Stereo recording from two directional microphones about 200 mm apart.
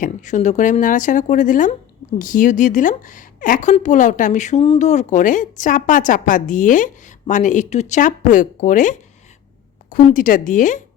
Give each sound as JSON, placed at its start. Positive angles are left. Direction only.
{"t": 0.0, "sound": "a woman's voice", "side_deg": 40}